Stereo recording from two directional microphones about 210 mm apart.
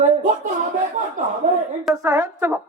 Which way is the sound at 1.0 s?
35° right (ahead or behind).